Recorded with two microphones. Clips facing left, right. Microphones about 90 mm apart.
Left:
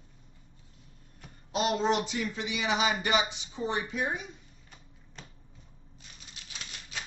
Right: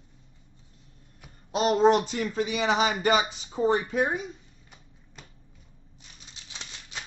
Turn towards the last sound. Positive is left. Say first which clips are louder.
# right 1 dB
turn(degrees=-25)  # may be behind; listen again after turning